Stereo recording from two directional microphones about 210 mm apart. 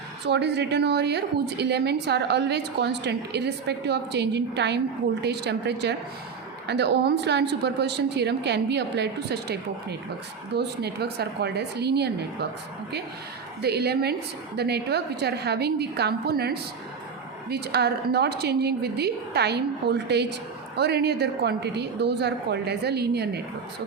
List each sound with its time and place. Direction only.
0.3 s a woman's voice: 55° right (ahead or behind)
13.6 s a woman's voice: 50° right (ahead or behind)